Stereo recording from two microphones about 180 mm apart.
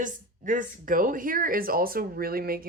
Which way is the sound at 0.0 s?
45° right (ahead or behind).